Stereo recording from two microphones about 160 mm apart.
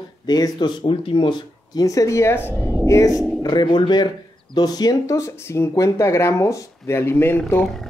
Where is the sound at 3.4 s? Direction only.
25° left (ahead or behind).